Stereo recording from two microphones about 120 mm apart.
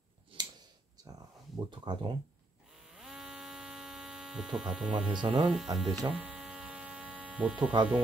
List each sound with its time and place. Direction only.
0.3 s a sound: 45° right (ahead or behind)
1.7 s speech: 40° right (ahead or behind)
2.9 s hum: 5° right (ahead or behind)
5.2 s speech: 40° right (ahead or behind)
5.5 s speech: centre (ahead or behind)
6.1 s hum: 5° right (ahead or behind)